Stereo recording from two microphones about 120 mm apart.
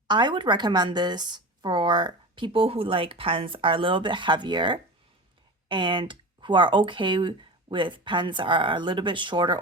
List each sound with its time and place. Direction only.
0.1 s a woman's voice: 40° right (ahead or behind)